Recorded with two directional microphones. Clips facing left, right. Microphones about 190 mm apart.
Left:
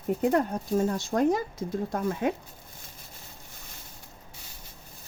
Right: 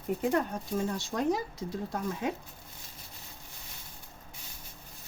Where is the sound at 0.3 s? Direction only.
45° left (ahead or behind).